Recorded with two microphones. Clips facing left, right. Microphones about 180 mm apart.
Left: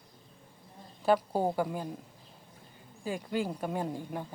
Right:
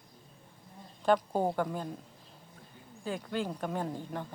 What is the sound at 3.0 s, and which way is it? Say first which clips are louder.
A woman's voice: left 2 dB; 10° left (ahead or behind).